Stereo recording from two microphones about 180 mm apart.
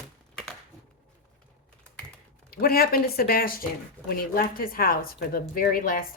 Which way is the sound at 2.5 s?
55° left (ahead or behind).